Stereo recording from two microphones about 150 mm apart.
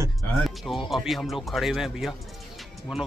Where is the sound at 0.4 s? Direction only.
Centre (ahead or behind).